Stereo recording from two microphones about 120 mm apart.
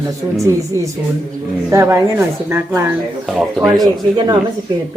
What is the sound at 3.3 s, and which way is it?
Speech, centre (ahead or behind).